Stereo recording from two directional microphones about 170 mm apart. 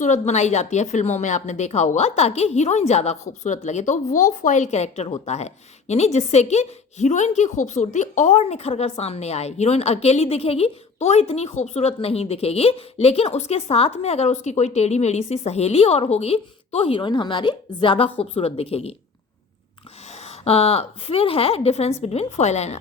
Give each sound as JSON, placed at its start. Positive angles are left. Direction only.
{"t": 0.0, "sound": "a woman's voice", "side_deg": 45}
{"t": 20.1, "sound": "a woman's voice", "side_deg": 40}